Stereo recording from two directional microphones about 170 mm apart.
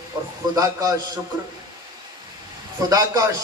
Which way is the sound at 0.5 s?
20° right (ahead or behind).